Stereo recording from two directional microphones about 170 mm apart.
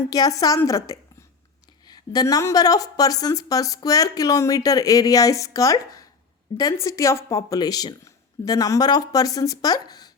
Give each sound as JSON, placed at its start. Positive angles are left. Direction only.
{"t": 0.1, "sound": "a woman's voice", "side_deg": 20}